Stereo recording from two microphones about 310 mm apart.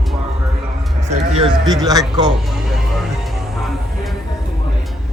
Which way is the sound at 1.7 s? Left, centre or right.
Centre.